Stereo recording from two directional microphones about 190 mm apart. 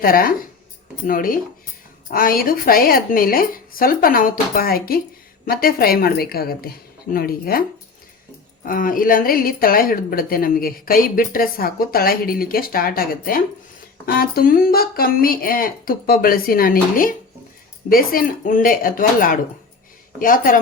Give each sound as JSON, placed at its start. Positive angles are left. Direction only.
{"t": 0.0, "sound": "a woman's voice", "side_deg": 50}
{"t": 8.6, "sound": "a woman's voice", "side_deg": 45}